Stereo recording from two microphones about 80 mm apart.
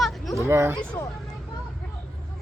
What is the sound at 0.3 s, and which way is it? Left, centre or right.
Speech, right.